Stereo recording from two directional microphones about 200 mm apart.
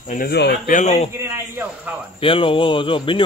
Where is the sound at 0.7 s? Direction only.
35° left (ahead or behind).